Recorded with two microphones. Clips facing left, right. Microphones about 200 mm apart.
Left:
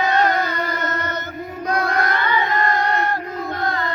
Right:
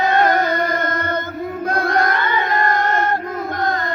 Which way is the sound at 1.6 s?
55° right (ahead or behind).